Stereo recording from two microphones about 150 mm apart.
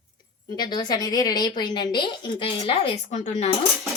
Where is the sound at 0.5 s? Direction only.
25° left (ahead or behind); by 3.5 s 45° left (ahead or behind).